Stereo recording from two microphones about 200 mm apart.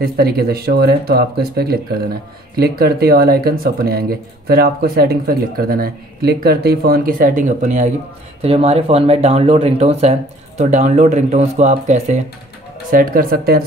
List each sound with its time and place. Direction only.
0.0 s speech: 50° right (ahead or behind)